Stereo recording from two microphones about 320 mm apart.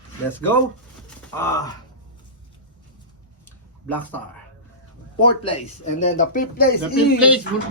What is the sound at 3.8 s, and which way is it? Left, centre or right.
Speech, centre.